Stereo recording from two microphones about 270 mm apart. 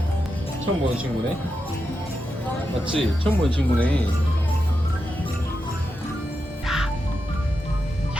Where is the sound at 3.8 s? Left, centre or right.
Centre.